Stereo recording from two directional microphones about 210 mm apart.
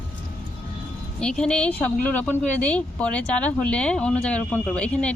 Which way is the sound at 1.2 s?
5° left (ahead or behind).